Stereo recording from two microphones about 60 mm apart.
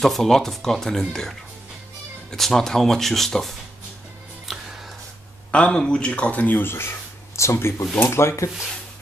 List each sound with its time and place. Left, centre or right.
0.0 s speech: centre
4.5 s music: centre
5.5 s speech: centre; by 8.5 s left